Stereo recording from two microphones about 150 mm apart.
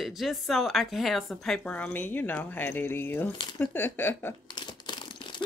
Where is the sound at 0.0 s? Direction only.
Centre (ahead or behind).